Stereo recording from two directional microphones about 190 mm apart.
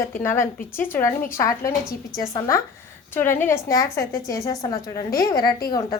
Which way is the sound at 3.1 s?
10° left (ahead or behind).